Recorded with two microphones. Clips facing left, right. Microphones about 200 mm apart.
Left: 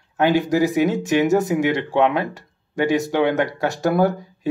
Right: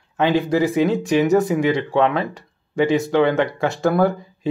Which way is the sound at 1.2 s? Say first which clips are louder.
Right 2 dB; centre (ahead or behind).